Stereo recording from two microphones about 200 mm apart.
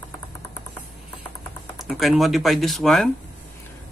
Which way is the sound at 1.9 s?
Centre (ahead or behind).